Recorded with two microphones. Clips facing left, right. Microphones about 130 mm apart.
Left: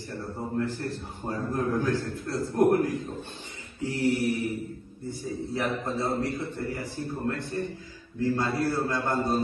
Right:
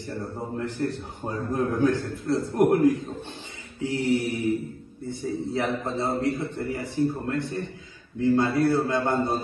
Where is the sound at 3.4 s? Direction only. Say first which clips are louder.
Right 1 dB; 25° right (ahead or behind).